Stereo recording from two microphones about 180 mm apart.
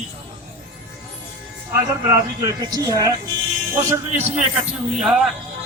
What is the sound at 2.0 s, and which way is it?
A woman's voice, 20° right (ahead or behind).